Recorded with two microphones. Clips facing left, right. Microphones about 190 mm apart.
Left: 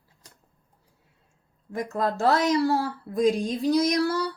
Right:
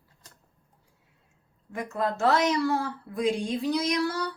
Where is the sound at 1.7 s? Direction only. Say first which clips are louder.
Left 2 dB; 35° left (ahead or behind).